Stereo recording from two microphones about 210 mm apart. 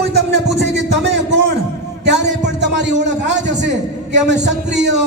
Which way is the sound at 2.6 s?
55° right (ahead or behind).